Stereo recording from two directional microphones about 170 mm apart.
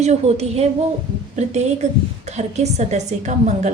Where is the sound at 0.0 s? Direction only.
40° right (ahead or behind).